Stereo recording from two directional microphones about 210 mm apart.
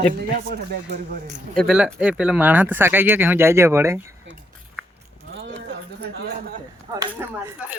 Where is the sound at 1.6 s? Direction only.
Centre (ahead or behind).